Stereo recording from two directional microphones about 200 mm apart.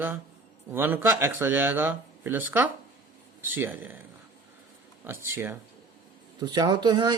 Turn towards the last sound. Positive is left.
turn(degrees=-20)  # may be behind; listen again after turning